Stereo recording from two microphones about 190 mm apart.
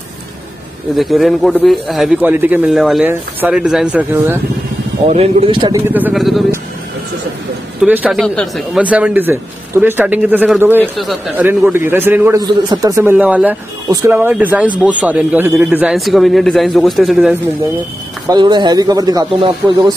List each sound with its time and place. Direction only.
0.9 s a man's voice: centre (ahead or behind)
5.1 s speech: 30° right (ahead or behind)
5.8 s a man's voice: 10° right (ahead or behind)
7.8 s a man's voice: 5° right (ahead or behind)
11.4 s a man's voice: 10° right (ahead or behind)
12.4 s a man's voice: 25° right (ahead or behind); by 17.4 s 5° right (ahead or behind)
18.3 s speech: 25° right (ahead or behind)